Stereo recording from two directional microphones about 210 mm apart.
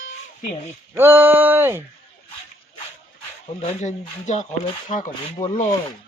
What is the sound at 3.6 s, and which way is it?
Speech, 35° left (ahead or behind).